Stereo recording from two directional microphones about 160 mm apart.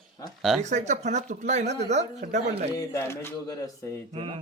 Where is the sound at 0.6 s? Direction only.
45° right (ahead or behind).